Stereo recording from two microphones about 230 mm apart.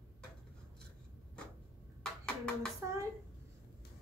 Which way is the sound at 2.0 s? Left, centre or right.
Centre.